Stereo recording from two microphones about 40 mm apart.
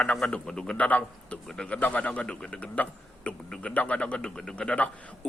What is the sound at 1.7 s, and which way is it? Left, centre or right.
Speech, left.